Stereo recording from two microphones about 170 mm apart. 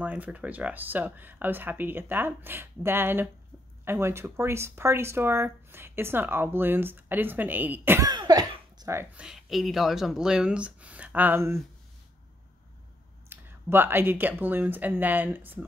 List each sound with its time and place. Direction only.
0.0 s speech: 10° right (ahead or behind)
8.1 s speech: 25° right (ahead or behind)
9.2 s speech: centre (ahead or behind)
13.3 s speech: 10° right (ahead or behind)